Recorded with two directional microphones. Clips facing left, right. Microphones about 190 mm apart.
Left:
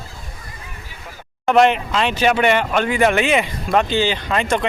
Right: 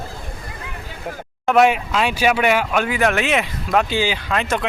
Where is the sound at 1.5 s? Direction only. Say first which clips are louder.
Even; 5° right (ahead or behind).